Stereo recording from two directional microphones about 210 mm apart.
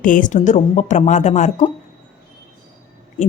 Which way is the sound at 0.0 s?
40° left (ahead or behind).